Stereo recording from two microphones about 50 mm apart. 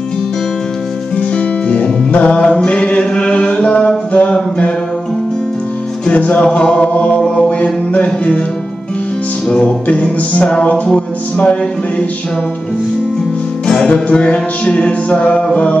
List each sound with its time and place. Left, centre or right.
1.1 s music: left
4.1 s mantra: left
6.0 s music: left
7.2 s mantra: centre
9.5 s music: centre
9.8 s music: left
13.7 s music: left